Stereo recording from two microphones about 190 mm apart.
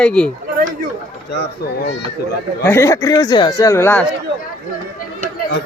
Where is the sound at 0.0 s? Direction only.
5° left (ahead or behind).